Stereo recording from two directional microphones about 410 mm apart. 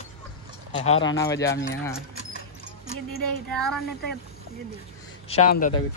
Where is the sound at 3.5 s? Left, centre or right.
Centre.